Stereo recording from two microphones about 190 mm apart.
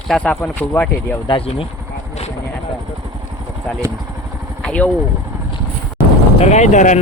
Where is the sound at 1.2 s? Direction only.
30° left (ahead or behind).